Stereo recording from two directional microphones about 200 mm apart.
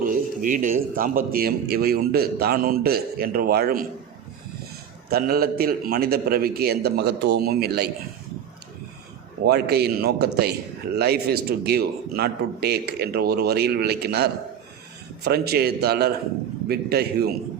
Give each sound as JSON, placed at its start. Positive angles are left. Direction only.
{"t": 0.0, "sound": "a sound", "side_deg": -45}
{"t": 0.9, "sound": "a man's voice", "side_deg": -45}
{"t": 5.0, "sound": "a man's voice", "side_deg": -50}
{"t": 9.4, "sound": "a man's voice", "side_deg": -55}